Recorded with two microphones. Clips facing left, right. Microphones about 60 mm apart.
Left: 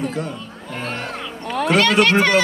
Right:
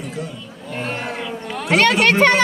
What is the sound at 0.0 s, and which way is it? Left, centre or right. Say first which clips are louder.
Speech: left 4 dB; left.